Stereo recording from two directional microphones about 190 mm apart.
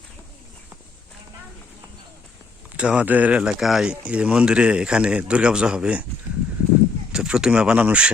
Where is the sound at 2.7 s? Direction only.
5° right (ahead or behind).